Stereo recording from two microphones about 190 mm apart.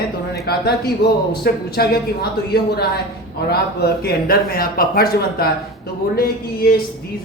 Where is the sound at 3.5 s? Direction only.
55° left (ahead or behind).